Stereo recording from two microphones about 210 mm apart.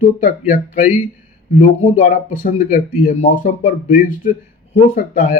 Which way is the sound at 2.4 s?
40° left (ahead or behind).